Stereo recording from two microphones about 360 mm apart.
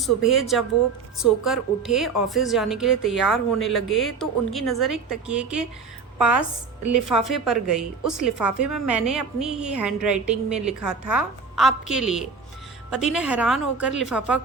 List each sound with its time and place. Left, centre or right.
0.0 s a woman's voice: centre
6.1 s a woman's voice: right
6.8 s a woman's voice: centre